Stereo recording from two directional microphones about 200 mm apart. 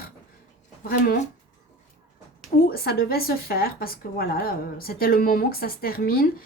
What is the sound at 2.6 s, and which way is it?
Speech, 50° left (ahead or behind).